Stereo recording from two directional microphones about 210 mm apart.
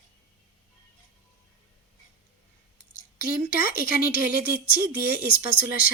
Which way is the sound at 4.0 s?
10° right (ahead or behind).